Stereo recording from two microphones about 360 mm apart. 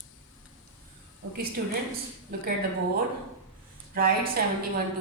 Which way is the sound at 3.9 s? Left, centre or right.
Right.